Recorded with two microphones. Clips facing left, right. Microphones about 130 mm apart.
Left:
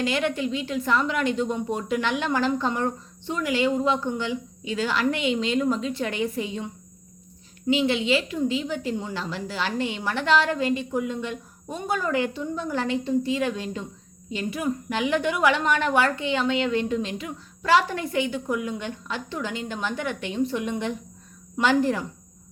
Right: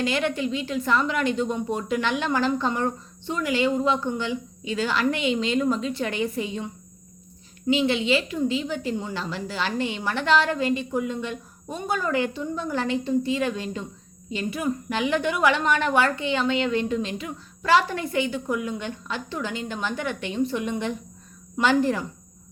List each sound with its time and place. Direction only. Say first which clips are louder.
0.0 s a woman's voice: even; 5° left (ahead or behind)
7.7 s a woman's voice: even; 10° left (ahead or behind)